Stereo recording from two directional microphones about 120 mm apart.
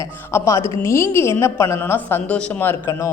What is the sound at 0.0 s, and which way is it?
A woman's voice, 25° left (ahead or behind).